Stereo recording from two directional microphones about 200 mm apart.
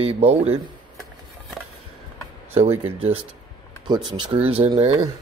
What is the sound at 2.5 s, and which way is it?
Speech, 30° right (ahead or behind).